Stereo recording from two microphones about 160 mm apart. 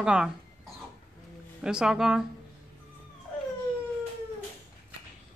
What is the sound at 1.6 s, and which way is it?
Speech, 5° right (ahead or behind).